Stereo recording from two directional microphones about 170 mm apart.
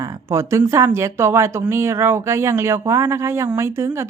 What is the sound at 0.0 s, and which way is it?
Speech, 15° right (ahead or behind).